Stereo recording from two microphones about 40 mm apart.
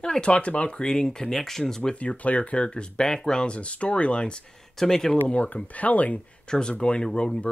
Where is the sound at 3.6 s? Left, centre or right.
Left.